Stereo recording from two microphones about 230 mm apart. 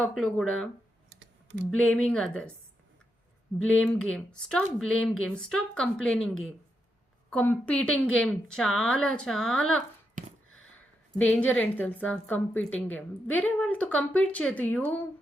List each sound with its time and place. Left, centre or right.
0.0 s speech: centre
1.7 s speech: centre
3.6 s speech: centre
10.2 s a sound: right
11.2 s a woman's voice: centre